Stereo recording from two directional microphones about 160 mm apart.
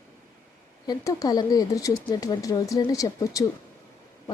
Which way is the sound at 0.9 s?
20° left (ahead or behind).